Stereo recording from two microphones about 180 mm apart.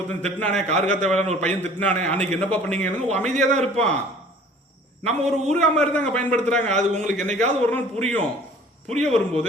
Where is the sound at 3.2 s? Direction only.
40° right (ahead or behind).